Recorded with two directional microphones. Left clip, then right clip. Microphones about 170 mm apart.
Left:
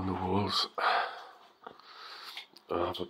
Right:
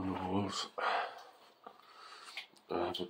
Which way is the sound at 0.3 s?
5° left (ahead or behind).